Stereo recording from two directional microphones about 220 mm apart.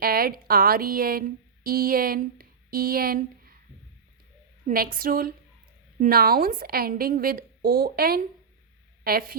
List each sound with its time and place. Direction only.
0.0 s speech: 45° right (ahead or behind)
4.6 s a woman's voice: 40° right (ahead or behind)